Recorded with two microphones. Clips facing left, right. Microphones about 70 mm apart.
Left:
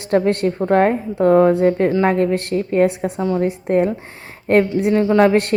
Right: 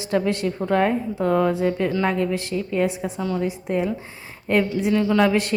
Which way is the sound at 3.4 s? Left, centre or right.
Left.